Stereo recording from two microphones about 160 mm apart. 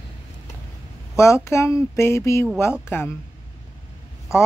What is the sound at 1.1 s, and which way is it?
Speech, 15° left (ahead or behind).